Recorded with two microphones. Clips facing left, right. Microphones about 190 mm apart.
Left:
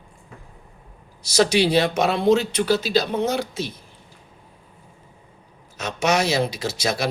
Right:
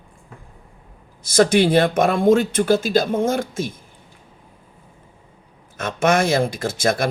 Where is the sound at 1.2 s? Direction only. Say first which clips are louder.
Right 3 dB; 50° right (ahead or behind).